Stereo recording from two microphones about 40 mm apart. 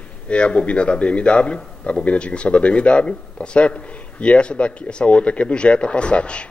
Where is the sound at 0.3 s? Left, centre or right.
Left.